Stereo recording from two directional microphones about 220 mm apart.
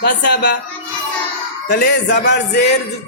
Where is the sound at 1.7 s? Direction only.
50° left (ahead or behind).